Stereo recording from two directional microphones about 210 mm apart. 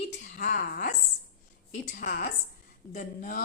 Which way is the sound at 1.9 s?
40° left (ahead or behind).